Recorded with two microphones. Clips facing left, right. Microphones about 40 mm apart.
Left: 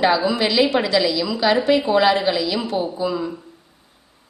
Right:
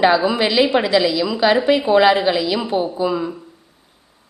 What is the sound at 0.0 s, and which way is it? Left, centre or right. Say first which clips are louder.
A woman's voice: right 3 dB; centre.